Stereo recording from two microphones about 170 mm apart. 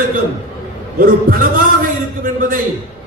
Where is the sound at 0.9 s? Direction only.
55° right (ahead or behind).